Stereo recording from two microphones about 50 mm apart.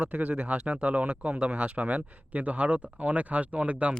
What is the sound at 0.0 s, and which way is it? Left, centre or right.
Speech, right.